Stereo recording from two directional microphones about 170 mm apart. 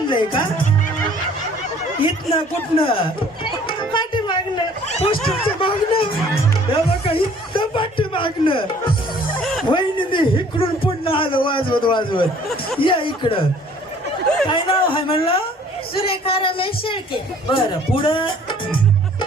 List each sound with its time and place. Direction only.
0.1 s speech: 30° left (ahead or behind)
2.0 s speech: 30° left (ahead or behind)
9.4 s music: centre (ahead or behind)
9.6 s a man's voice: 30° left (ahead or behind)
14.4 s speech: 30° left (ahead or behind)